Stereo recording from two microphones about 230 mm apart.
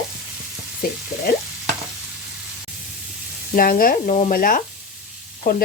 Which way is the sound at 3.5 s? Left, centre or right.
Left.